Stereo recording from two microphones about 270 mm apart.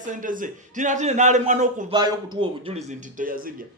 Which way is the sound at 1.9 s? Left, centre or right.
Centre.